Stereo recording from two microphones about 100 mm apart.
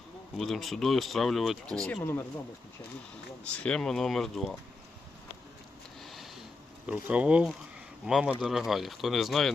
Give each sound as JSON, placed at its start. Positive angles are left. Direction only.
{"t": 0.3, "sound": "speech", "side_deg": 5}
{"t": 3.4, "sound": "speech", "side_deg": 10}
{"t": 6.0, "sound": "a sound", "side_deg": 0}
{"t": 6.8, "sound": "bee", "side_deg": -10}
{"t": 8.0, "sound": "speech", "side_deg": -10}